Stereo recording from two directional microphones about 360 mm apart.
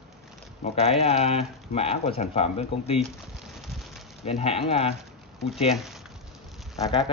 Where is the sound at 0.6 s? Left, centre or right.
Centre.